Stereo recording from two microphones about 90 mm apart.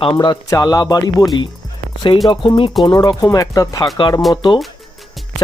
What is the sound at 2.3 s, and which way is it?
Speech, 60° left (ahead or behind).